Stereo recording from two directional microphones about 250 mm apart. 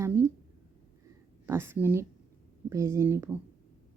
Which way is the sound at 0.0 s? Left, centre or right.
Centre.